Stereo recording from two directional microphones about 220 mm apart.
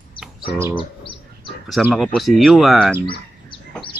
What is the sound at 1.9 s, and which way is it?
Speech, centre (ahead or behind).